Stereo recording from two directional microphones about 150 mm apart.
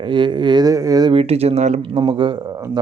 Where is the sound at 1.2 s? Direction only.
45° right (ahead or behind).